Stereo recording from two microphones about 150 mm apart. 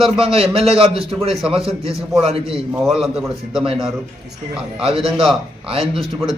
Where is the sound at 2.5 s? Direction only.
Centre (ahead or behind).